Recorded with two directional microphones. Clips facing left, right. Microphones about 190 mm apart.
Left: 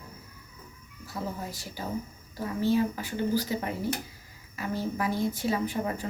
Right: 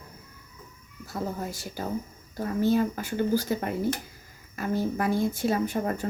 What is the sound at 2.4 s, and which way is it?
A woman's voice, 50° right (ahead or behind).